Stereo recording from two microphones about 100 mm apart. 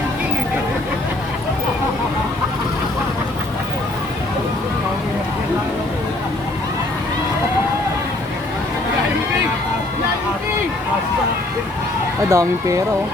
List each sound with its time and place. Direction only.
12.3 s speech: 30° right (ahead or behind)